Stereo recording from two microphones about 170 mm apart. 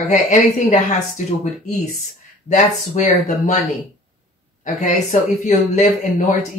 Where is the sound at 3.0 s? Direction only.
45° left (ahead or behind).